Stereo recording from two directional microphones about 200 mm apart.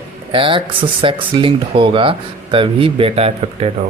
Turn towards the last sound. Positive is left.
turn(degrees=-30)  # may be behind; listen again after turning